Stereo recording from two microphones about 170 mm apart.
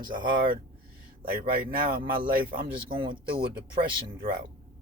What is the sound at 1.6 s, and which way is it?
Speech, 60° right (ahead or behind).